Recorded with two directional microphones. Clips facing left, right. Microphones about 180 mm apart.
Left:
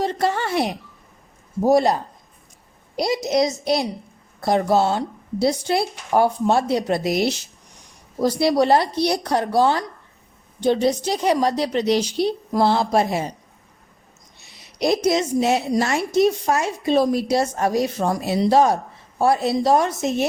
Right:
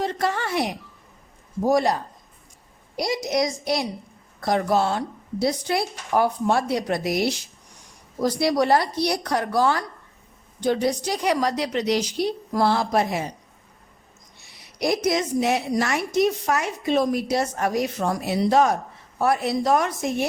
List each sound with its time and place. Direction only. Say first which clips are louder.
0.0 s a sound: left 3 dB; 30° left (ahead or behind)
1.6 s a woman's voice: left 4 dB; 25° left (ahead or behind)
3.0 s a woman's voice: left 4 dB; 25° left (ahead or behind)
14.4 s a woman's voice: left 3 dB; 25° left (ahead or behind)